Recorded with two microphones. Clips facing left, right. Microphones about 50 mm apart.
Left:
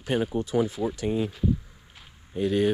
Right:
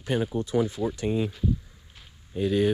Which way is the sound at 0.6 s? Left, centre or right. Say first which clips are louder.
Even; centre.